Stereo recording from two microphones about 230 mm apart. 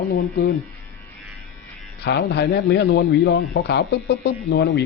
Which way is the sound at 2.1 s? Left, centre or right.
Left.